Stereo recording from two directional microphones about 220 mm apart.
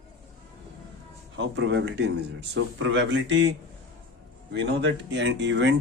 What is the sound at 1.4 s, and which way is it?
Speech, 55° right (ahead or behind).